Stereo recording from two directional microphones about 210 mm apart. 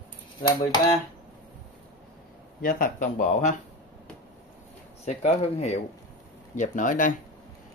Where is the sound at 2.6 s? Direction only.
40° left (ahead or behind).